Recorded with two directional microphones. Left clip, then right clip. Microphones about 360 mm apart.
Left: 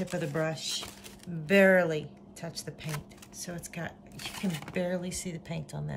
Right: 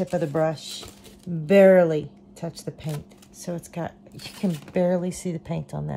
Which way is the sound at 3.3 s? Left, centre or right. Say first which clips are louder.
Right 8 dB; centre.